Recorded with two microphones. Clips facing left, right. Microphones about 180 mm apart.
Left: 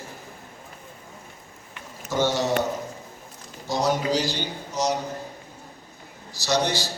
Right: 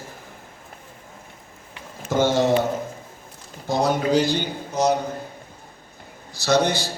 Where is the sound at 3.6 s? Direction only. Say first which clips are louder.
Right 3 dB; 55° right (ahead or behind).